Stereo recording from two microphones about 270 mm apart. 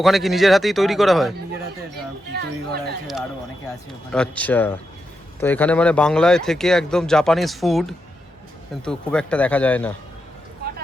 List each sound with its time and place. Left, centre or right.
0.0 s speech: centre
2.3 s speech: right
4.1 s speech: centre